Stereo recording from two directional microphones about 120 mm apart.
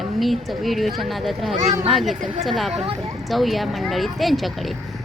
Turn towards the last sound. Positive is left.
turn(degrees=0)  # may be behind; listen again after turning